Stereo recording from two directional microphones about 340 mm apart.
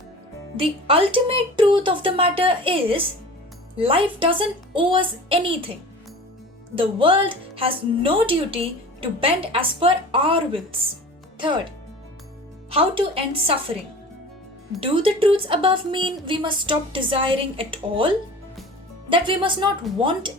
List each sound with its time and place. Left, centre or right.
0.5 s speech: centre
6.7 s speech: centre
12.7 s speech: centre
14.8 s speech: centre